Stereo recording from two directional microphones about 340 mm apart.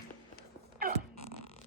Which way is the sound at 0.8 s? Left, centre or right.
Right.